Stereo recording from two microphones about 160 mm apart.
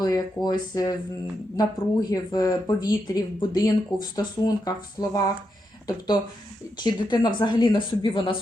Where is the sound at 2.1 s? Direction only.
25° left (ahead or behind).